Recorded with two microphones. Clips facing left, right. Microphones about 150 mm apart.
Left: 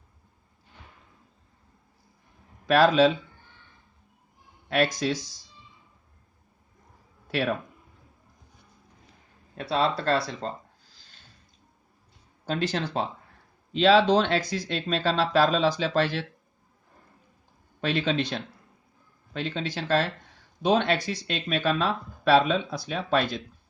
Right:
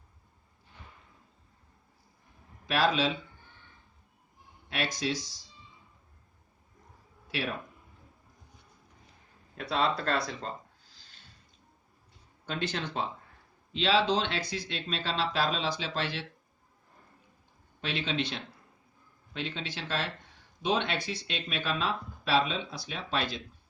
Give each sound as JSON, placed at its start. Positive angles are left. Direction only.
{"t": 2.6, "sound": "speech", "side_deg": 45}
{"t": 4.7, "sound": "speech", "side_deg": 45}
{"t": 7.3, "sound": "speech", "side_deg": 50}
{"t": 9.6, "sound": "speech", "side_deg": 30}
{"t": 12.5, "sound": "speech", "side_deg": 35}
{"t": 17.7, "sound": "speech", "side_deg": 45}